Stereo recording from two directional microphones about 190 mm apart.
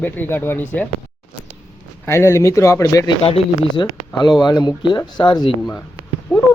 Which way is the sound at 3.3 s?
30° left (ahead or behind).